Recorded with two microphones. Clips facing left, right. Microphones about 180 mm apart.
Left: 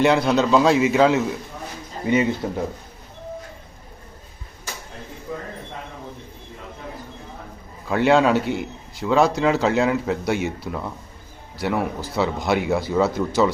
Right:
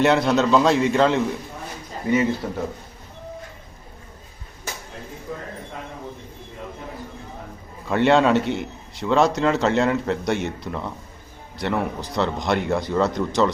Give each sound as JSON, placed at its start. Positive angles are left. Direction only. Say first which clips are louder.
{"t": 0.0, "sound": "a man's voice", "louder": "even", "side_deg": 0}
{"t": 2.4, "sound": "a man's voice", "louder": "left 2 dB", "side_deg": 20}
{"t": 7.9, "sound": "a man's voice", "louder": "even", "side_deg": 0}